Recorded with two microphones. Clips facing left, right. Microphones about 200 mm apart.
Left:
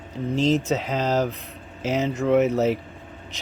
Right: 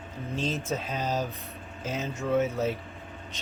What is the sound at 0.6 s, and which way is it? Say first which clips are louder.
Speech: left 7 dB; 85° left.